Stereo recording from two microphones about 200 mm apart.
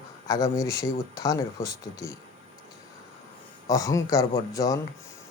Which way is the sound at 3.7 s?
15° left (ahead or behind).